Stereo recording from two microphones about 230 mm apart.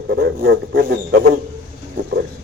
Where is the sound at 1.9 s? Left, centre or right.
Right.